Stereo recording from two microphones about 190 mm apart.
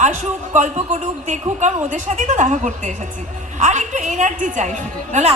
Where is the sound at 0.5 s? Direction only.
40° right (ahead or behind).